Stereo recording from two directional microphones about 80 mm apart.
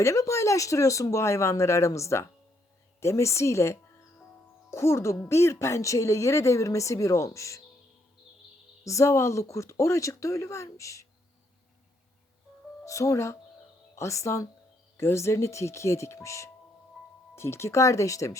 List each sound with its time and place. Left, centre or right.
0.0 s speech: left
8.8 s speech: left
12.8 s speech: left
17.0 s music: centre
17.3 s speech: left